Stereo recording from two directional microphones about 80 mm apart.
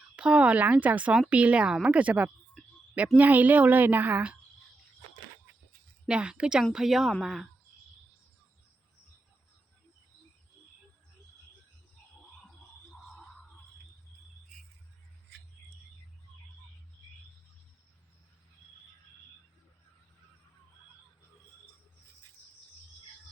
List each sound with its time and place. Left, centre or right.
0.2 s a woman's voice: centre
6.1 s a woman's voice: centre